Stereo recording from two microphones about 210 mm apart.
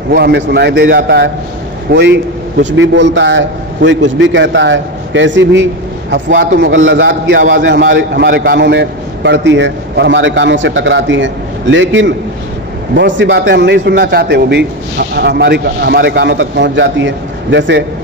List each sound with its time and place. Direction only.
0.1 s a man's voice: 50° right (ahead or behind)